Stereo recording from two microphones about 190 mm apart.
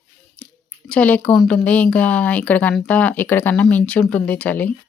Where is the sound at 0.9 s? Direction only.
5° left (ahead or behind).